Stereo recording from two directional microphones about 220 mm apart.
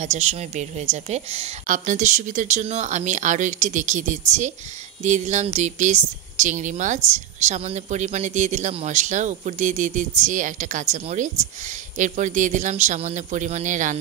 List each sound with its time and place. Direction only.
0.0 s speech: 30° right (ahead or behind)